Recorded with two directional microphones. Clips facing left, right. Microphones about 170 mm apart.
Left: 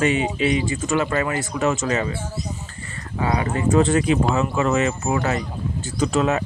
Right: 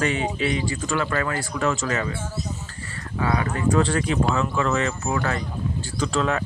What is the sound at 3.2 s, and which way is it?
Speech, 20° left (ahead or behind).